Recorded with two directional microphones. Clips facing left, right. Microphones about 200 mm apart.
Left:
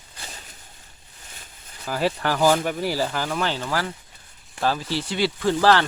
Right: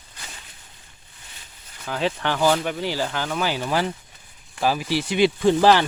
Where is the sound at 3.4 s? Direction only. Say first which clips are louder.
Right 5 dB; 10° right (ahead or behind).